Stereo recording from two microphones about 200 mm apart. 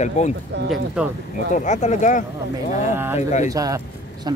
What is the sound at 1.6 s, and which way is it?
Speech, 35° left (ahead or behind).